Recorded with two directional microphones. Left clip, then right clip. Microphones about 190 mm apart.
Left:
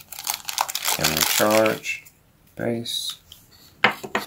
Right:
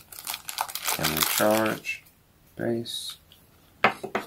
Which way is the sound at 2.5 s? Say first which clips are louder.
Left 3 dB; 20° left (ahead or behind).